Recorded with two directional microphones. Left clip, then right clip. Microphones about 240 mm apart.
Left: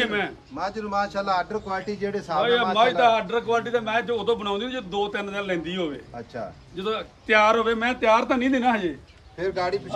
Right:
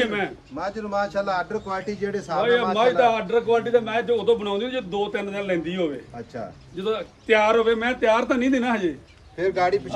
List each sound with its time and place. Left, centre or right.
0.0 s a man's voice: centre
0.6 s speech: left
2.4 s a man's voice: centre; by 8.9 s left
9.4 s speech: centre